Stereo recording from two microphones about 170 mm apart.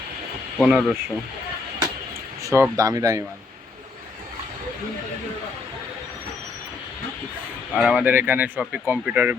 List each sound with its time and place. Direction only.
0.6 s speech: centre (ahead or behind)
2.4 s speech: 20° right (ahead or behind)
7.7 s speech: 5° right (ahead or behind)